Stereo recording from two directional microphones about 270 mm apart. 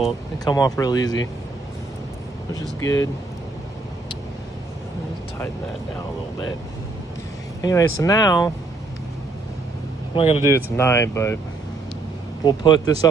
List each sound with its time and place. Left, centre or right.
0.5 s speech: centre
2.8 s speech: centre
7.6 s speech: centre
10.1 s speech: centre
12.4 s speech: centre